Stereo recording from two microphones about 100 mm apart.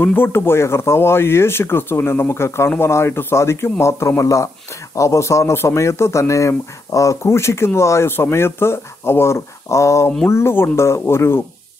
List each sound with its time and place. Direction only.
0.0 s speech: 20° left (ahead or behind)